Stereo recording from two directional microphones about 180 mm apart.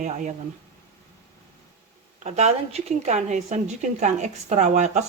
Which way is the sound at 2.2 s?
40° right (ahead or behind).